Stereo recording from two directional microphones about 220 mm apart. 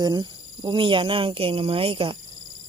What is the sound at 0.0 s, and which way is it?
Speech, 20° right (ahead or behind).